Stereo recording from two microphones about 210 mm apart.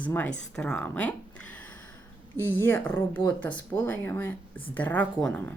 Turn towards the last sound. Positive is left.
turn(degrees=5)  # may be behind; listen again after turning